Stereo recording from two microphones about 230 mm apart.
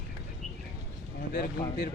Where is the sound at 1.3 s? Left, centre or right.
Left.